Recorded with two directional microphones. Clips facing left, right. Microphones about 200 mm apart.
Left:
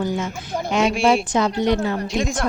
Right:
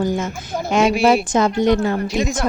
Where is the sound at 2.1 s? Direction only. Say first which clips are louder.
Right 2 dB; centre (ahead or behind).